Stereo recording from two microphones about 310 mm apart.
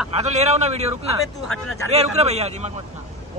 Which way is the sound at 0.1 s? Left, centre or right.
Right.